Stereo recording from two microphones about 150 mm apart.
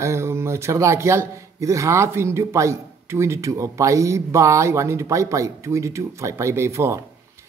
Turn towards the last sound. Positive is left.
turn(degrees=-20)  # may be behind; listen again after turning